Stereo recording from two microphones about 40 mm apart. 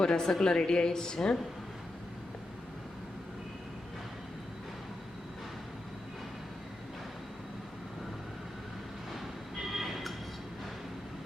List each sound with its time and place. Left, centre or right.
0.0 s a woman's voice: centre
9.6 s train: centre